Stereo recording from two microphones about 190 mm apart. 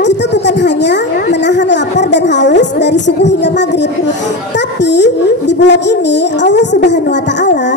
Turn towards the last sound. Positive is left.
turn(degrees=65)  # may be behind; listen again after turning